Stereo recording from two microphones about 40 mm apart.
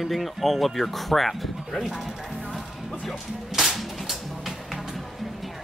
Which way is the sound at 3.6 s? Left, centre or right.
Centre.